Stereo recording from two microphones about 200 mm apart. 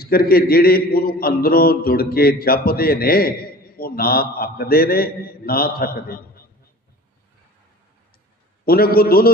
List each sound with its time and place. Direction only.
0.0 s a man's voice: 50° left (ahead or behind)
8.6 s a man's voice: 50° left (ahead or behind)